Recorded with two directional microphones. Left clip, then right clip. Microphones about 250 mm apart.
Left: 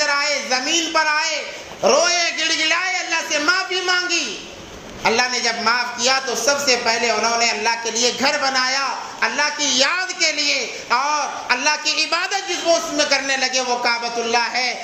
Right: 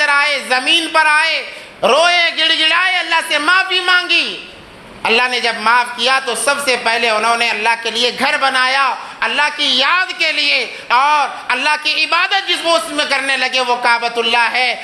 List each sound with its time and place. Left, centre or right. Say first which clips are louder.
0.0 s a woman's voice: right 6 dB; right
1.8 s a sound: right 5 dB; right
5.0 s a man's voice: right 4 dB; right